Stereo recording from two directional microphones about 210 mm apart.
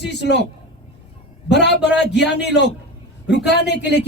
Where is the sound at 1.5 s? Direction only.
55° left (ahead or behind).